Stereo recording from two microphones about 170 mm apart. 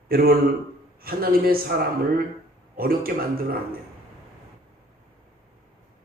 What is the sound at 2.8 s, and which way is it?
A man's voice, 60° right (ahead or behind).